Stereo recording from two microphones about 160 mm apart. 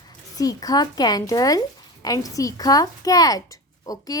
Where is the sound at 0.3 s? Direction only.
20° left (ahead or behind).